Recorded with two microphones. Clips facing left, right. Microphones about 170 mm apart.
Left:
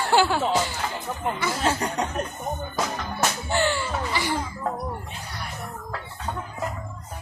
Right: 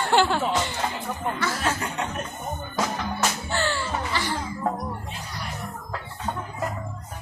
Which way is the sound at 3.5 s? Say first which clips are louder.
Left 2 dB; 15° left (ahead or behind).